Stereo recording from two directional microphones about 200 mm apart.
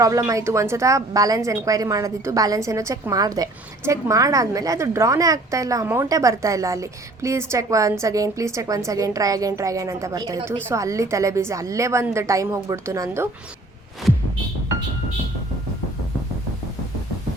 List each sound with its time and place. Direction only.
0.0 s a woman's voice: 15° right (ahead or behind)